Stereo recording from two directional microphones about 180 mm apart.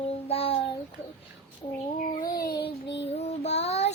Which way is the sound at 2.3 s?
60° left (ahead or behind).